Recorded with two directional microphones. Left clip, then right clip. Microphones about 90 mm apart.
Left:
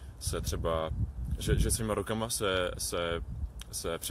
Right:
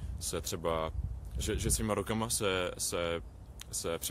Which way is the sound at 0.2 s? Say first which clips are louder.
Left 1 dB; 40° right (ahead or behind).